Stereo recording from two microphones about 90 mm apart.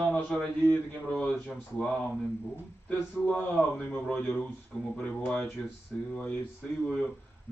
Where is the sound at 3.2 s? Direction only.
10° left (ahead or behind).